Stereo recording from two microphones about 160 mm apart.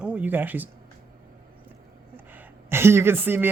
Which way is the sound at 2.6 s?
15° right (ahead or behind).